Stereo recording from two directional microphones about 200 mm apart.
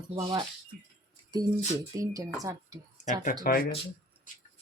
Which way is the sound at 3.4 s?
45° left (ahead or behind).